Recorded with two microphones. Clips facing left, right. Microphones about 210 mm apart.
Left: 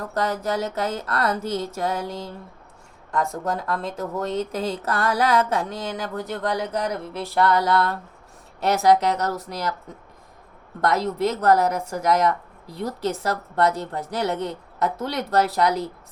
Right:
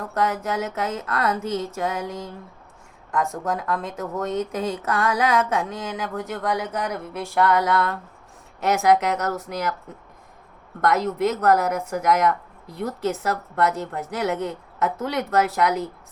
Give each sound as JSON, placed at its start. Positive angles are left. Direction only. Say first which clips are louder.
{"t": 0.1, "sound": "speech", "louder": "even", "side_deg": 35}
{"t": 3.6, "sound": "speech", "louder": "even", "side_deg": 35}
{"t": 10.8, "sound": "speech", "louder": "right 1 dB", "side_deg": 35}